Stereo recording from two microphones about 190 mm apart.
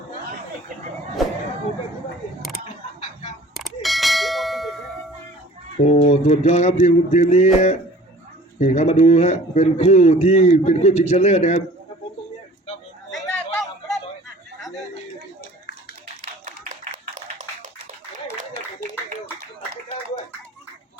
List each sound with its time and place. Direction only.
1.2 s speech: centre (ahead or behind)
3.5 s ding: centre (ahead or behind)
5.8 s a man's voice: 35° left (ahead or behind)
13.1 s a sound: centre (ahead or behind)
16.2 s tap: 40° right (ahead or behind)